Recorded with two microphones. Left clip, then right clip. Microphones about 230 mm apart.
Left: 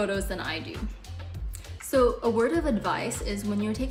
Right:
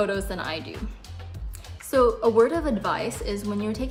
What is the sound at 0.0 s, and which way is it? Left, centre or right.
Music, centre.